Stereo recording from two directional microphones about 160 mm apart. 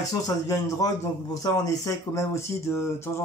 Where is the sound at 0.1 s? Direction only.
20° left (ahead or behind).